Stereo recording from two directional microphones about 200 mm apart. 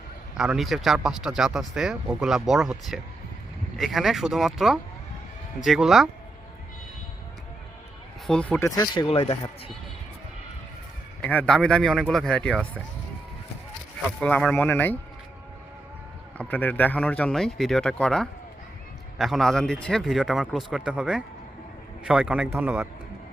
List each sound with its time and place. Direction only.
0.3 s speech: centre (ahead or behind)
8.3 s speech: 5° left (ahead or behind)
8.7 s speech: 20° left (ahead or behind)
11.2 s speech: 5° left (ahead or behind)
14.2 s speech: 5° left (ahead or behind)
16.4 s a man's voice: 10° left (ahead or behind); by 22.9 s 10° right (ahead or behind)